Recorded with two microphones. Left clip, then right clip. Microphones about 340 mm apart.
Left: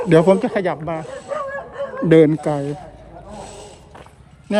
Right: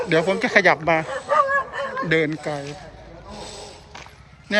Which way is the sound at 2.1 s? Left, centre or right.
Centre.